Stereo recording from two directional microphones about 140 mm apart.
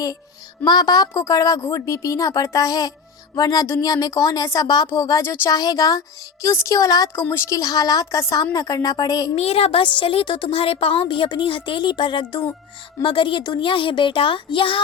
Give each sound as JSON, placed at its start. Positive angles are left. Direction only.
{"t": 0.6, "sound": "speech", "side_deg": 30}
{"t": 9.3, "sound": "a woman's voice", "side_deg": 45}